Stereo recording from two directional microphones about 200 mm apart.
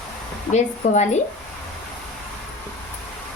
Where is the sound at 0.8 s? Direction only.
35° left (ahead or behind).